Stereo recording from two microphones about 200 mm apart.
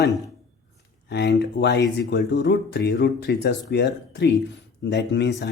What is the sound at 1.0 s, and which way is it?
Speech, 60° left (ahead or behind).